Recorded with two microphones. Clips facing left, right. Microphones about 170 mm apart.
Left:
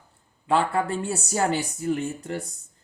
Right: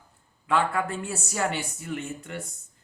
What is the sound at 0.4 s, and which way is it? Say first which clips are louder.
Speech: left 2 dB; 30° left (ahead or behind).